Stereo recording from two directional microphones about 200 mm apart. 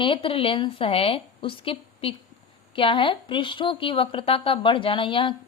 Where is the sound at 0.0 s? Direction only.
25° left (ahead or behind).